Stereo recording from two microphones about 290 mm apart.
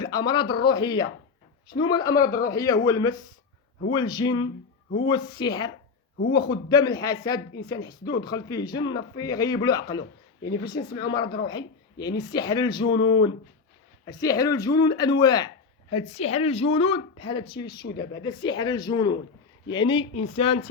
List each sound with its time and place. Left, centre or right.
0.0 s speech: centre
13.0 s speech: left
14.0 s speech: centre